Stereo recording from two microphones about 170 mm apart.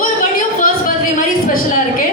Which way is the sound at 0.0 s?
55° left (ahead or behind).